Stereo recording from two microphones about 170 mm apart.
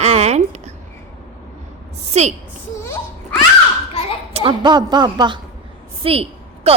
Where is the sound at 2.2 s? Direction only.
40° right (ahead or behind).